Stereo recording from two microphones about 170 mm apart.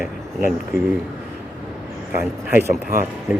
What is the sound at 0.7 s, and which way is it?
Speech, 60° left (ahead or behind).